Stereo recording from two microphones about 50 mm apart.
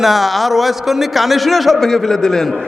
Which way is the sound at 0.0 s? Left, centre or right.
Centre.